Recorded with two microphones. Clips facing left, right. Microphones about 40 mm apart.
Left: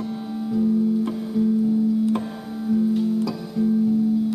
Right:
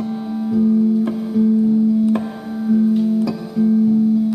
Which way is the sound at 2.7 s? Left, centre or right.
Centre.